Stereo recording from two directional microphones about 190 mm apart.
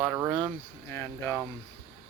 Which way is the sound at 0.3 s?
25° right (ahead or behind).